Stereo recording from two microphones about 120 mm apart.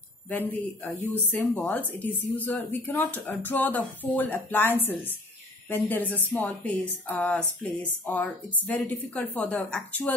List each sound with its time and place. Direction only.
0.3 s speech: 15° left (ahead or behind)